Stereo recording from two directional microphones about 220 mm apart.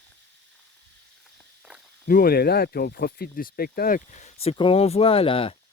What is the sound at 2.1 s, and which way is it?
Speech, 40° left (ahead or behind).